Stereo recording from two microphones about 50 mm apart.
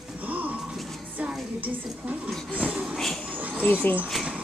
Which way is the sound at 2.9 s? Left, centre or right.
Centre.